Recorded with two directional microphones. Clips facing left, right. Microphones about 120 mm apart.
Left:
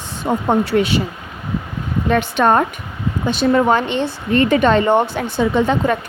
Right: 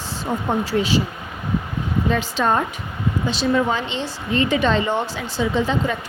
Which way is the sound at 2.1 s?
60° left (ahead or behind).